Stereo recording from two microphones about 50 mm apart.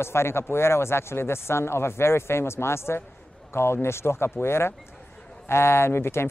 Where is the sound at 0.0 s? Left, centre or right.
Left.